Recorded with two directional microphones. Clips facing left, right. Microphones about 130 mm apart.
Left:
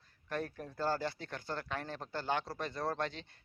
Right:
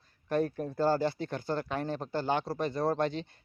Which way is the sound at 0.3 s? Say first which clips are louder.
Right 10 dB; 25° right (ahead or behind).